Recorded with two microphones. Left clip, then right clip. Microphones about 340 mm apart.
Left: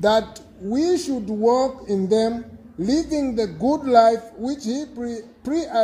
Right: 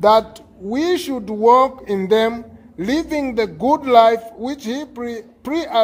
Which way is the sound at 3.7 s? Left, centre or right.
Right.